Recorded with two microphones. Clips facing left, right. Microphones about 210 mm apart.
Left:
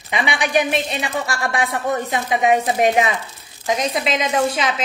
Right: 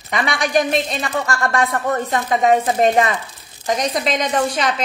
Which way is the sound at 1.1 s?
15° left (ahead or behind).